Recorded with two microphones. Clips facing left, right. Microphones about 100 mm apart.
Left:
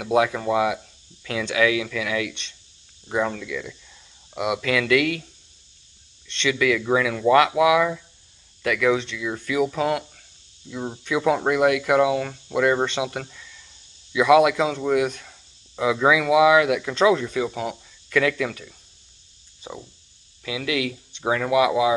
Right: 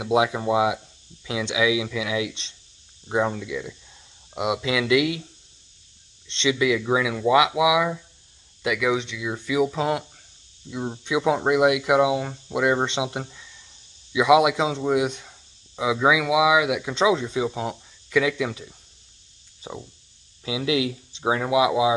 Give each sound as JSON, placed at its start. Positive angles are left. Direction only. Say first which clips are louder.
{"t": 0.0, "sound": "speech", "louder": "left 1 dB", "side_deg": -20}
{"t": 6.2, "sound": "speech", "louder": "even", "side_deg": -25}